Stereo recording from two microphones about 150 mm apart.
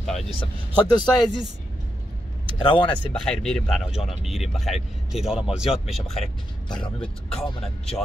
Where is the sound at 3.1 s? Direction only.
5° left (ahead or behind).